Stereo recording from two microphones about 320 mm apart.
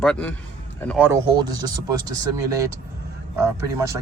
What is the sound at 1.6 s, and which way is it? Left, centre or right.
Speech, centre.